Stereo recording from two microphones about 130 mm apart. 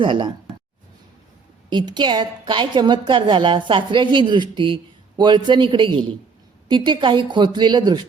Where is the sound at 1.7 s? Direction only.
35° right (ahead or behind).